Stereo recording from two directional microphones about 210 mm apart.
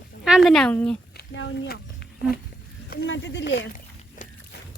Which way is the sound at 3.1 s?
60° left (ahead or behind).